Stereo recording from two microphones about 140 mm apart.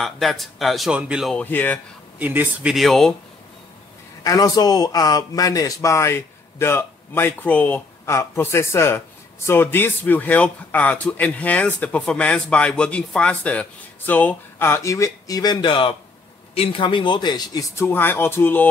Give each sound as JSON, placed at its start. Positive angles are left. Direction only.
{"t": 0.0, "sound": "speech", "side_deg": 0}
{"t": 1.3, "sound": "speech", "side_deg": 10}
{"t": 2.1, "sound": "speech", "side_deg": -10}
{"t": 4.2, "sound": "speech", "side_deg": 25}
{"t": 17.7, "sound": "speech", "side_deg": 15}